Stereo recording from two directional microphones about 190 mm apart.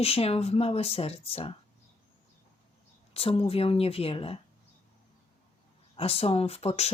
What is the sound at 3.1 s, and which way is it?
Speech, 30° left (ahead or behind).